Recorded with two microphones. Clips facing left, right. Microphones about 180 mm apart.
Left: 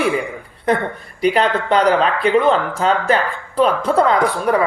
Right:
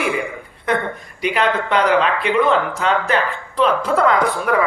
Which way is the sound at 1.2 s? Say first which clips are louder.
Left 3 dB; 35° left (ahead or behind).